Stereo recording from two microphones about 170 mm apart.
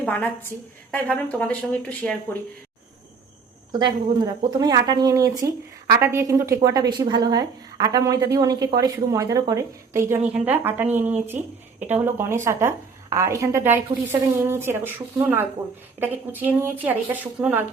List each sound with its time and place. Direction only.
0.0 s a woman's voice: 10° left (ahead or behind)
3.7 s a woman's voice: 25° right (ahead or behind); by 17.7 s 10° right (ahead or behind)